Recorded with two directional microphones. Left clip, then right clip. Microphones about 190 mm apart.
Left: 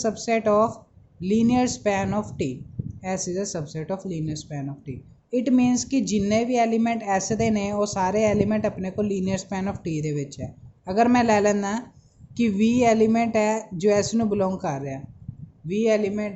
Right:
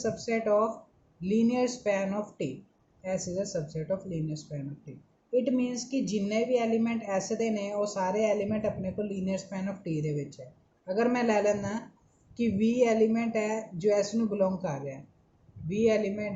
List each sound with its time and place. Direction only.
0.0 s a woman's voice: 50° left (ahead or behind)